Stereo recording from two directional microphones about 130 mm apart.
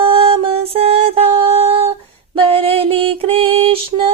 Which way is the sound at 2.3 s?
45° right (ahead or behind).